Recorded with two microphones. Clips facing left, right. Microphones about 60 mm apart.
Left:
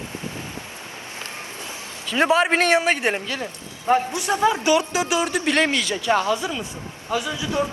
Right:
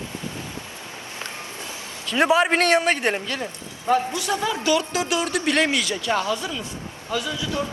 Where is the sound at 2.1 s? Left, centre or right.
Centre.